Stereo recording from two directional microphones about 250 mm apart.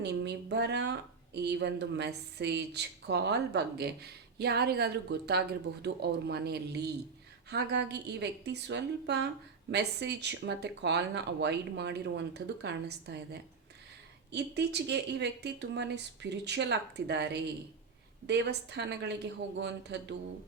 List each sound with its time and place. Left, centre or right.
0.0 s speech: right